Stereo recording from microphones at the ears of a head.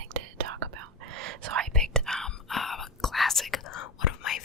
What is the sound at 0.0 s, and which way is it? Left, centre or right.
Whispering, right.